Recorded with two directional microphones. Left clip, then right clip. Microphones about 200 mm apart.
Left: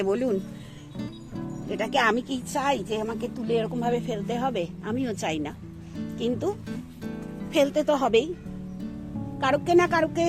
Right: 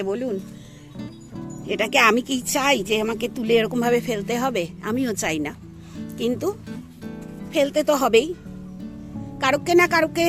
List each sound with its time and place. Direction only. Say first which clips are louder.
0.0 s speech: even; centre (ahead or behind)
0.9 s music: even; centre (ahead or behind)
1.7 s speech: right 6 dB; 25° right (ahead or behind)
6.7 s music: even; centre (ahead or behind)
7.7 s speech: right 4 dB; 15° right (ahead or behind)
9.4 s a woman's voice: right 3 dB; 15° right (ahead or behind)